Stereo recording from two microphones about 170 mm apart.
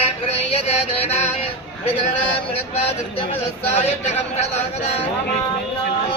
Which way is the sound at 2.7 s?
35° left (ahead or behind).